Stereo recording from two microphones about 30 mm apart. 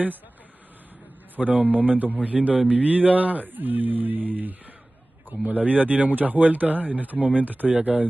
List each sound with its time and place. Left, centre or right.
1.3 s a man's voice: right
2.1 s a man's voice: right
5.3 s a man's voice: right